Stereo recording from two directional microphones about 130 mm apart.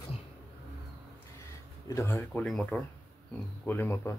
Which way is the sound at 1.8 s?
25° left (ahead or behind).